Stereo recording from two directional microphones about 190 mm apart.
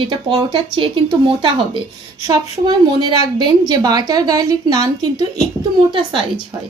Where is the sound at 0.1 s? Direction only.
25° right (ahead or behind).